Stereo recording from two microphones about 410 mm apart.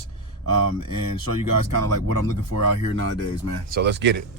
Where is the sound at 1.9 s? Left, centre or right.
Right.